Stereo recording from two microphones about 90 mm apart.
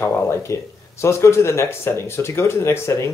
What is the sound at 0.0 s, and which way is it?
Speech, 30° left (ahead or behind).